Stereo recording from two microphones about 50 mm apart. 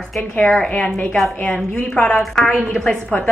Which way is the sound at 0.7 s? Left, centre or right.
Left.